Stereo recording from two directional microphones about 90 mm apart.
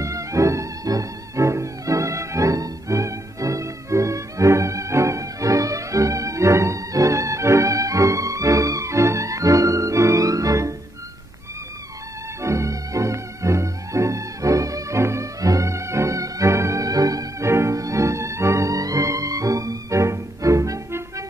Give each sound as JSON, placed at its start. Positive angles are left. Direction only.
{"t": 0.0, "sound": "music", "side_deg": -35}
{"t": 12.4, "sound": "music", "side_deg": -35}